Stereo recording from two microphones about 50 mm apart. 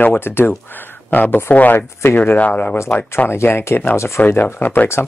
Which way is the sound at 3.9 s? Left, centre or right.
Left.